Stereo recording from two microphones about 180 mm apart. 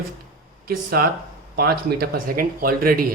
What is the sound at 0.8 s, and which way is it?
Speech, 55° right (ahead or behind).